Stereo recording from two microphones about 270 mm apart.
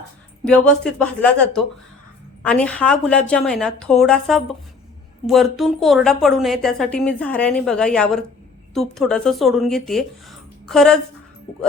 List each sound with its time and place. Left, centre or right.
0.4 s a woman's voice: centre